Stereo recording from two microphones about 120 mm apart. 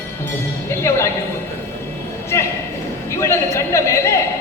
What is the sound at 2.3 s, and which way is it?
A man's voice, 25° left (ahead or behind).